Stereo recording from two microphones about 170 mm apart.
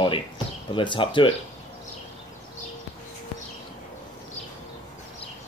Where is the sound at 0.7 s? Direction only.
30° left (ahead or behind).